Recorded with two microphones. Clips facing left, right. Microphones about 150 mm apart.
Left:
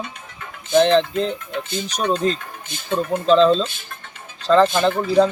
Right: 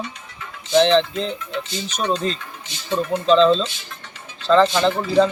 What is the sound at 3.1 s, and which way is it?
Speech, 5° left (ahead or behind).